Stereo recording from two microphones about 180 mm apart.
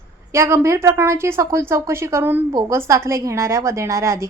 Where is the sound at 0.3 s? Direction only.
15° right (ahead or behind).